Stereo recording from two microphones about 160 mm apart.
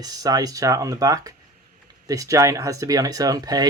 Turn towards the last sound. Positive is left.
turn(degrees=-25)  # may be behind; listen again after turning